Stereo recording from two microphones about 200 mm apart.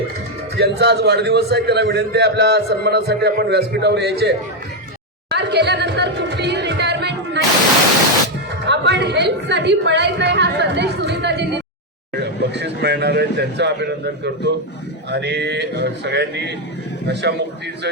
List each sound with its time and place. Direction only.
0.5 s a man's voice: 55° right (ahead or behind)
8.6 s a man's voice: 60° right (ahead or behind)